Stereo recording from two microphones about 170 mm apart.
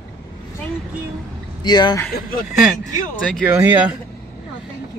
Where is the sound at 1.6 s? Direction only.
25° left (ahead or behind).